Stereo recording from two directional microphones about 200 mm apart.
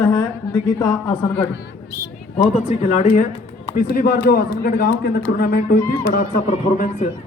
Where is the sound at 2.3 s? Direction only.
35° left (ahead or behind); by 6.4 s 50° left (ahead or behind).